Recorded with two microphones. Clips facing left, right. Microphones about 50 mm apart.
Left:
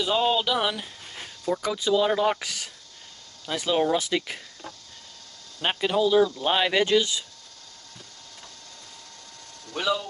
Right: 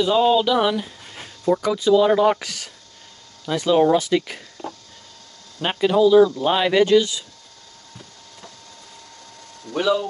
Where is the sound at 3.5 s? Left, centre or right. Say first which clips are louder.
Right 7 dB; centre.